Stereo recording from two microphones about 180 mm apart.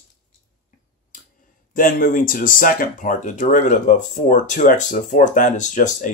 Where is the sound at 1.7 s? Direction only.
50° left (ahead or behind).